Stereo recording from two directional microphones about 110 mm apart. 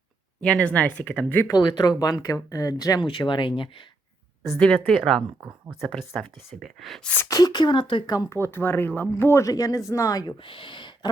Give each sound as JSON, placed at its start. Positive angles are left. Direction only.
{"t": 0.4, "sound": "speech", "side_deg": 10}
{"t": 1.5, "sound": "speech", "side_deg": 40}
{"t": 3.0, "sound": "speech", "side_deg": 50}
{"t": 4.9, "sound": "speech", "side_deg": 5}
{"t": 7.2, "sound": "speech", "side_deg": 35}
{"t": 8.1, "sound": "speech", "side_deg": 35}
{"t": 8.4, "sound": "speech", "side_deg": 20}
{"t": 10.4, "sound": "speech", "side_deg": 50}